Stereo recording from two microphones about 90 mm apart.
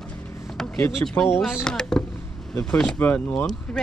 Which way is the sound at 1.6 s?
10° left (ahead or behind).